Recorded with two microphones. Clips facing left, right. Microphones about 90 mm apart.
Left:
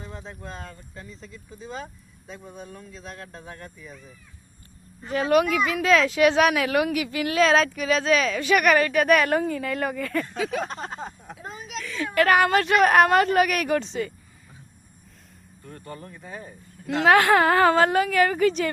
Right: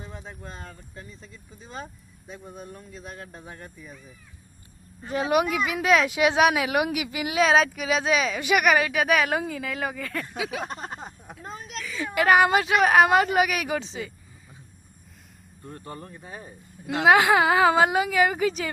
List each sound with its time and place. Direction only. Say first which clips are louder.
2.9 s a woman's voice: even; 15° right (ahead or behind)
5.0 s a woman's voice: left 2 dB; 15° right (ahead or behind)
11.3 s a woman's voice: even; 5° left (ahead or behind)
15.6 s a woman's voice: even; 20° right (ahead or behind)
17.2 s a woman's voice: left 1 dB; 5° right (ahead or behind)